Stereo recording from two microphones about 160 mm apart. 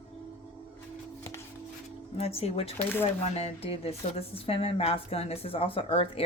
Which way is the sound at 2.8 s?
15° left (ahead or behind).